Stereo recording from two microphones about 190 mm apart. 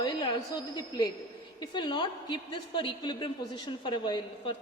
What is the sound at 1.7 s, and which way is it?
A woman's voice, 25° left (ahead or behind).